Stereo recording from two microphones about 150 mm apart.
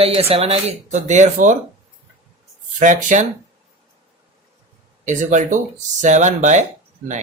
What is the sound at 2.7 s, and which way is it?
Speech, 55° right (ahead or behind).